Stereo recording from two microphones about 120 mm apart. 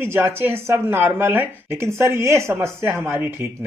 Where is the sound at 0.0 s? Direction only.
20° right (ahead or behind).